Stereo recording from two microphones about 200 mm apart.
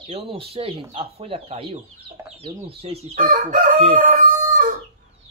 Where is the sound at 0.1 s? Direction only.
30° right (ahead or behind).